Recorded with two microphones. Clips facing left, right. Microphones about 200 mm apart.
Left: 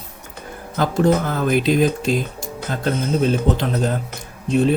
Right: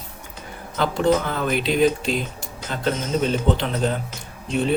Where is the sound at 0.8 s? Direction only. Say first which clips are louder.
Left 2 dB; 45° left (ahead or behind).